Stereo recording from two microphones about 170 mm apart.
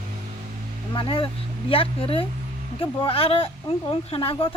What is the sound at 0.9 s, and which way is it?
A woman's voice, 30° left (ahead or behind).